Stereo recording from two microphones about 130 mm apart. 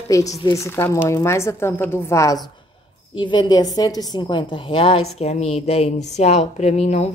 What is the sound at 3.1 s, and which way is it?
A woman's voice, 35° left (ahead or behind).